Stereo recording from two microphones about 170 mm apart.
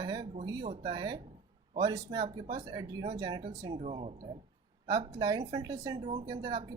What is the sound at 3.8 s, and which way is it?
Speech, 35° right (ahead or behind).